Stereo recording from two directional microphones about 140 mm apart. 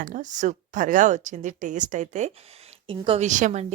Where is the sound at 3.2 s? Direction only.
60° right (ahead or behind).